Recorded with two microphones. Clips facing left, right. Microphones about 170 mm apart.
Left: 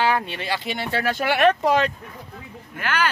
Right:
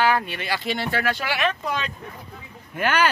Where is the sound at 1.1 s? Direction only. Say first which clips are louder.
Left 7 dB; 55° left (ahead or behind); by 1.9 s 75° left (ahead or behind).